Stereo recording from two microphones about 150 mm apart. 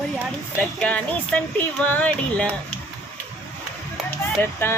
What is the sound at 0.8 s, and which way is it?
Speech, 10° left (ahead or behind).